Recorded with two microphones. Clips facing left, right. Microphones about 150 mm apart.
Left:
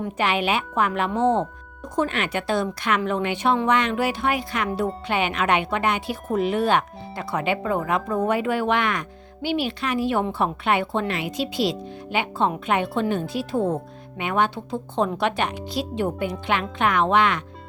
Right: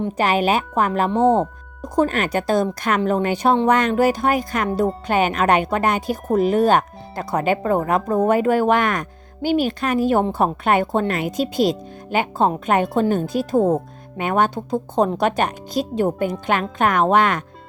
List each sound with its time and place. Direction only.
0.2 s speech: 40° right (ahead or behind)